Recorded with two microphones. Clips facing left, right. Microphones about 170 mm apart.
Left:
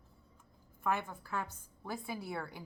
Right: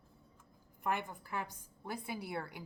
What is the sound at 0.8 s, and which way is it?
Speech, 15° right (ahead or behind).